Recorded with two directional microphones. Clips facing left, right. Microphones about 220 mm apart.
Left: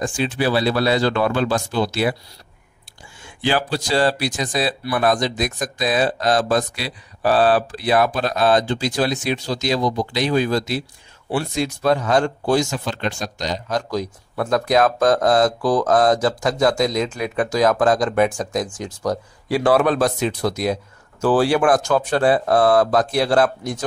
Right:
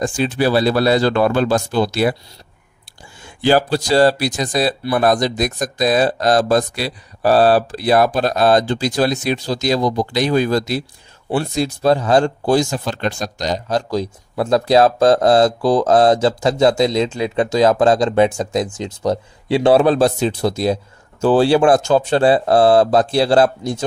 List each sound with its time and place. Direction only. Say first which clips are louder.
0.0 s speech: right 4 dB; 40° right (ahead or behind)
3.3 s speech: right 6 dB; 40° right (ahead or behind)